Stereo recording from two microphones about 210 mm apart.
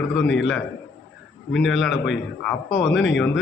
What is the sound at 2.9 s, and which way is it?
Speech, 60° left (ahead or behind).